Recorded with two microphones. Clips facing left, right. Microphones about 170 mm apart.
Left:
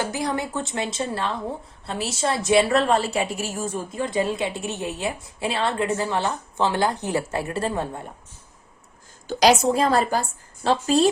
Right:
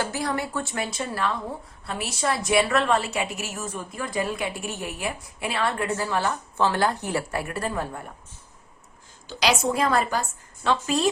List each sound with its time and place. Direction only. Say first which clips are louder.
0.0 s a woman's voice: left 2 dB; 20° left (ahead or behind)
9.2 s a woman's voice: left 7 dB; 45° left (ahead or behind)
9.6 s a woman's voice: left 3 dB; 30° left (ahead or behind)